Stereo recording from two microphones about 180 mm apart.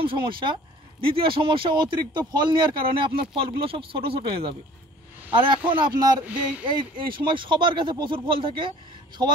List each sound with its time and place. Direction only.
0.0 s speech: 30° right (ahead or behind)